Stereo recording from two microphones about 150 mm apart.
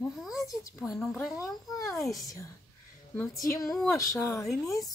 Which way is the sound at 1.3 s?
25° left (ahead or behind).